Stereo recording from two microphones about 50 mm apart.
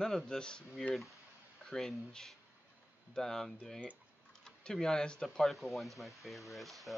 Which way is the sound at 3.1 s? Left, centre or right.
Centre.